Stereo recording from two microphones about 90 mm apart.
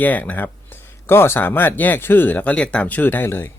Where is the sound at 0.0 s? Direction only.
20° left (ahead or behind).